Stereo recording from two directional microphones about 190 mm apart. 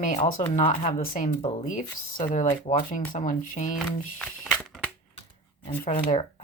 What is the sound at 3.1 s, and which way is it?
Speech, 45° left (ahead or behind).